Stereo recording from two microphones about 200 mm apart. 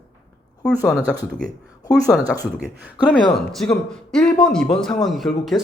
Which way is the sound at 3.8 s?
5° left (ahead or behind).